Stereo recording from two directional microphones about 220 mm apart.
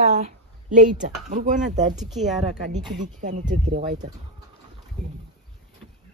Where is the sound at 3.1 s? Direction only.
35° right (ahead or behind).